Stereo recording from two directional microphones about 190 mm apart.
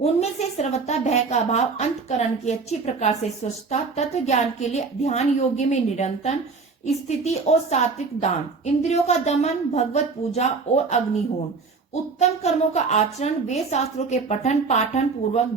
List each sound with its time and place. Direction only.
0.0 s a woman's voice: 35° left (ahead or behind)
12.2 s a woman's voice: 35° left (ahead or behind)